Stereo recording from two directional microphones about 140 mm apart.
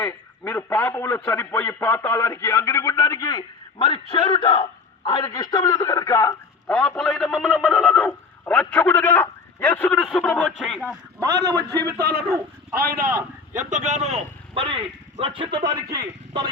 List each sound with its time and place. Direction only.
0.0 s a man's voice: 20° left (ahead or behind)
3.8 s a man's voice: 40° left (ahead or behind); by 6.3 s 20° left (ahead or behind)
6.7 s a man's voice: 5° left (ahead or behind)
11.4 s a man's voice: 25° right (ahead or behind)
12.7 s speech: 90° right
13.6 s a man's voice: 60° right (ahead or behind); by 16.5 s 30° right (ahead or behind)